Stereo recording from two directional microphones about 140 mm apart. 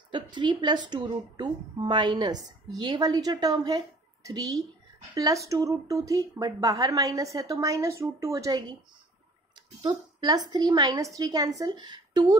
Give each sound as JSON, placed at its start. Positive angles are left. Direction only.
{"t": 0.1, "sound": "a woman's voice", "side_deg": -35}
{"t": 9.8, "sound": "a woman's voice", "side_deg": -30}